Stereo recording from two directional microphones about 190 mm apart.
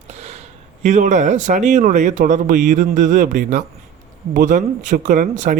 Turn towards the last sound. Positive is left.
turn(degrees=-40)  # may be behind; listen again after turning